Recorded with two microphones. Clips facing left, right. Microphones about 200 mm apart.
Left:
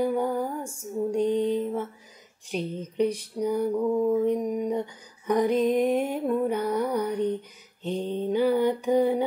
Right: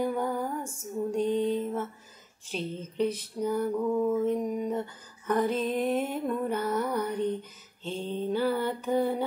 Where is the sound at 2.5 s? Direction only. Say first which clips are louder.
Left 4 dB; 15° left (ahead or behind).